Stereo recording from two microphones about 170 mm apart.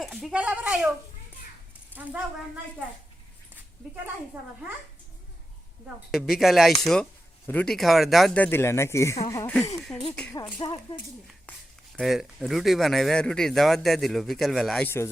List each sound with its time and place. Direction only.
0.0 s speech: centre (ahead or behind)
6.1 s speech: centre (ahead or behind); by 9.6 s 15° left (ahead or behind)
9.8 s speech: 5° left (ahead or behind)
10.6 s speech: 25° left (ahead or behind)
11.9 s speech: centre (ahead or behind)